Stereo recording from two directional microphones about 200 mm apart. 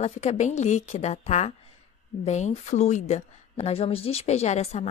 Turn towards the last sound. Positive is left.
turn(degrees=35)  # may be behind; listen again after turning